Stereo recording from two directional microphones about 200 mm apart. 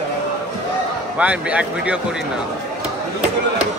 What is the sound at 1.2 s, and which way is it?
Speech, 5° right (ahead or behind).